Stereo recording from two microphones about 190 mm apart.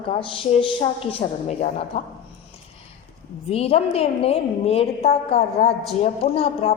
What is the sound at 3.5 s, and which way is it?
A woman's voice, 30° left (ahead or behind).